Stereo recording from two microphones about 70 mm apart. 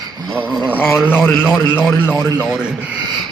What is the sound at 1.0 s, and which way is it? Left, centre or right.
Speech, left.